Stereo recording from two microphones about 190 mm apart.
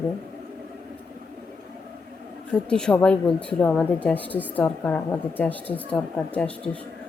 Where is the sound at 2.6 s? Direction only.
5° left (ahead or behind).